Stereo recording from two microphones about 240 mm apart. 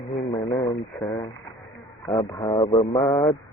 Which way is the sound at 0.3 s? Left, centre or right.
Centre.